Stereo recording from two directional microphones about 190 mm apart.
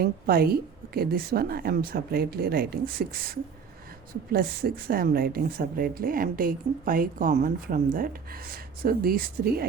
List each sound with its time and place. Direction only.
0.0 s speech: 55° right (ahead or behind)